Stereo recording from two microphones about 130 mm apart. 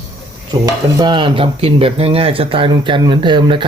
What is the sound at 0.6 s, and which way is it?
Speech, 30° right (ahead or behind).